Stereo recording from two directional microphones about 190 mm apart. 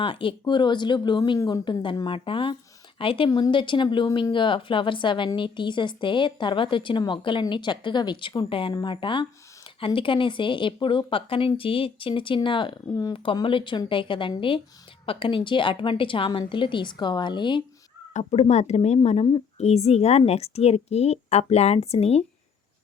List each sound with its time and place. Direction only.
0.0 s speech: 30° left (ahead or behind)
18.1 s speech: 35° left (ahead or behind)